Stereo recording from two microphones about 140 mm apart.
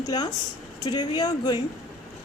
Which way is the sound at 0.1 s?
30° left (ahead or behind).